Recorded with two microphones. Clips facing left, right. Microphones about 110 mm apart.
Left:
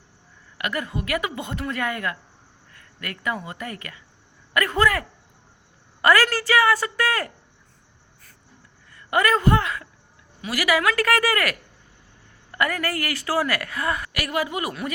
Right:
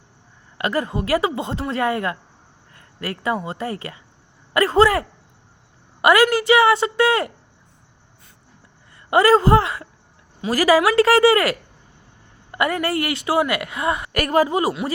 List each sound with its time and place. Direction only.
0.6 s a man's voice: 30° right (ahead or behind)
8.9 s a man's voice: 25° right (ahead or behind)
14.1 s a man's voice: 45° right (ahead or behind)